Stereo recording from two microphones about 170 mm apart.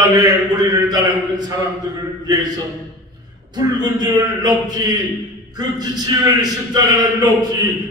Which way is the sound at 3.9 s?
25° right (ahead or behind).